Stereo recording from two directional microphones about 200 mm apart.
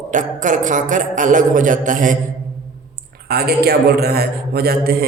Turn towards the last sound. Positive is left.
turn(degrees=-50)  # may be behind; listen again after turning